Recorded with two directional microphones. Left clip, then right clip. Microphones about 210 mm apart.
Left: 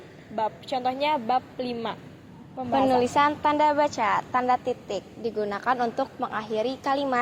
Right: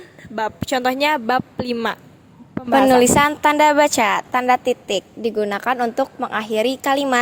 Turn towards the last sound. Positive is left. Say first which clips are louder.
# right 7 dB
turn(degrees=-50)  # may be behind; listen again after turning